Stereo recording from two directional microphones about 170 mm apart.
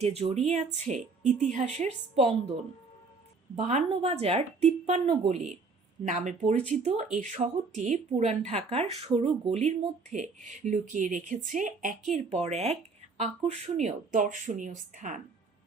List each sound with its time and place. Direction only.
0.0 s speech: 35° right (ahead or behind)
3.5 s speech: 45° right (ahead or behind)
12.1 s speech: 40° right (ahead or behind)